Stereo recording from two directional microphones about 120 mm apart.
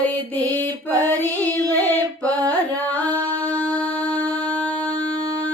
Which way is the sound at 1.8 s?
15° left (ahead or behind).